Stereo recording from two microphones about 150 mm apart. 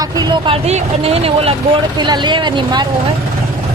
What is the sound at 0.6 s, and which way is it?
Speech, 45° right (ahead or behind).